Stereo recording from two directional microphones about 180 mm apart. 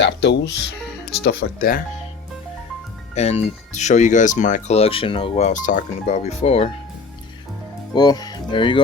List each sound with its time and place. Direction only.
0.0 s speech: 75° left (ahead or behind)
1.2 s speech: 60° left (ahead or behind)
3.2 s speech: 35° left (ahead or behind)
7.9 s speech: 20° left (ahead or behind)